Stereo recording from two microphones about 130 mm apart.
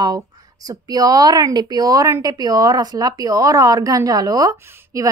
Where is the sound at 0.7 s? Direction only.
30° right (ahead or behind).